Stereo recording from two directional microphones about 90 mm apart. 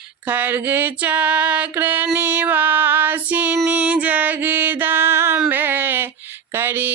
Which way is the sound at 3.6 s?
15° right (ahead or behind).